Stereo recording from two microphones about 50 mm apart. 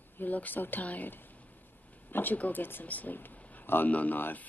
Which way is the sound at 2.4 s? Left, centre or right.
Left.